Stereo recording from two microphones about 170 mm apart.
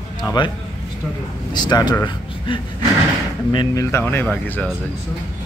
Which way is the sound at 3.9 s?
15° left (ahead or behind).